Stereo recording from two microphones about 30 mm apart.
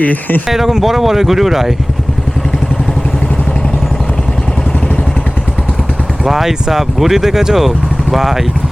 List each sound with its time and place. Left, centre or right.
0.0 s speech: left
0.4 s speech: centre
6.2 s speech: centre